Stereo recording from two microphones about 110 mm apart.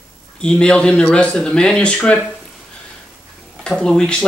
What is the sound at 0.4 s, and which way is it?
Speech, 10° left (ahead or behind).